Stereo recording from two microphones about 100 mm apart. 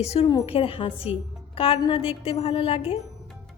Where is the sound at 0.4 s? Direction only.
70° left (ahead or behind).